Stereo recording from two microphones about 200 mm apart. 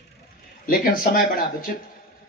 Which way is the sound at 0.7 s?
45° left (ahead or behind).